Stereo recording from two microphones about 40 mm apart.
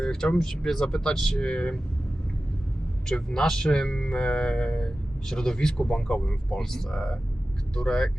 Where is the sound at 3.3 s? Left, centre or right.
Centre.